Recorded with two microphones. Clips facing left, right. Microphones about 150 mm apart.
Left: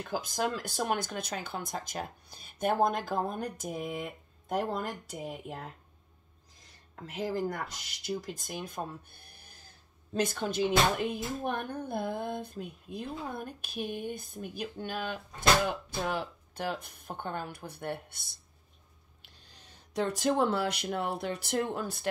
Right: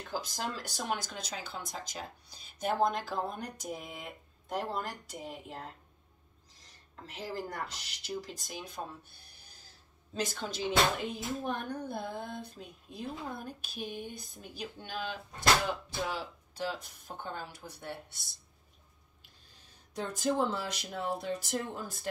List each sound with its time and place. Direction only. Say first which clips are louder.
0.1 s speech: left 5 dB; 50° left (ahead or behind)
6.6 s speech: left 4 dB; 50° left (ahead or behind)
19.2 s speech: left 5 dB; 85° left; by 22.1 s 70° left (ahead or behind)